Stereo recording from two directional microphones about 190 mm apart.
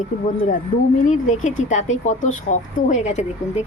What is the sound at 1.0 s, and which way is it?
Speech, 40° left (ahead or behind).